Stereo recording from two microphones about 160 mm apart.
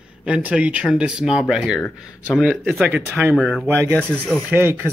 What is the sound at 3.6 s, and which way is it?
Speech, 15° right (ahead or behind).